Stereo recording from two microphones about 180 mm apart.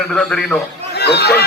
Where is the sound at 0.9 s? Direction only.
65° left (ahead or behind).